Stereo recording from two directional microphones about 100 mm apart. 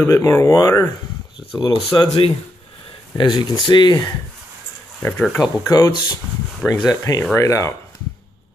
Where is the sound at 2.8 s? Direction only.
55° left (ahead or behind).